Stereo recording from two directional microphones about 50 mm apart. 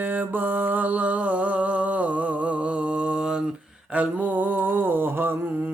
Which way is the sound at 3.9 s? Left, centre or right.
Right.